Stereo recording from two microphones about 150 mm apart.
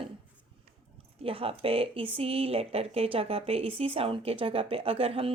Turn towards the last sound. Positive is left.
turn(degrees=-40)  # may be behind; listen again after turning